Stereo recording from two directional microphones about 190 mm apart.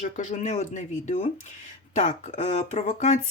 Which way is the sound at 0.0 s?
40° left (ahead or behind).